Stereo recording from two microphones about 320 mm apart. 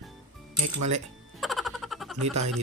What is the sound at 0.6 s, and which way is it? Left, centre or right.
Speech, right.